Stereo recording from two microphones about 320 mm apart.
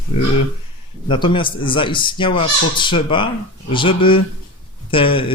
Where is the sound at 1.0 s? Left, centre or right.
Centre.